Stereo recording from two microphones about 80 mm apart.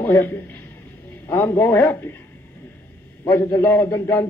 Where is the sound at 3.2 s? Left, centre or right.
Left.